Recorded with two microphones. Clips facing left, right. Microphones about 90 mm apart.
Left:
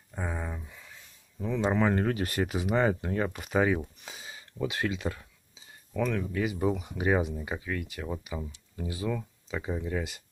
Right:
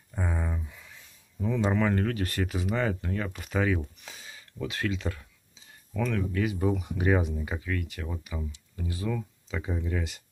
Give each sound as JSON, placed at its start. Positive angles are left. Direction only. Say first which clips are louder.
{"t": 0.1, "sound": "a sound", "louder": "right 2 dB", "side_deg": 5}
{"t": 1.4, "sound": "speech", "louder": "right 1 dB", "side_deg": 0}
{"t": 1.7, "sound": "speech", "louder": "left 3 dB", "side_deg": 15}